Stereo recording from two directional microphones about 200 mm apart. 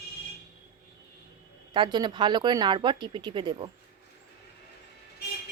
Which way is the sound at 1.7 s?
20° right (ahead or behind).